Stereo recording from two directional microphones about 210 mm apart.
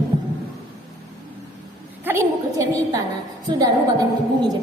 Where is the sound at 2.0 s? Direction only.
10° right (ahead or behind).